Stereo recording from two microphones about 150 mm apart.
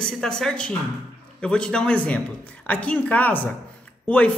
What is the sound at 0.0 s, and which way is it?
Speech, 5° left (ahead or behind).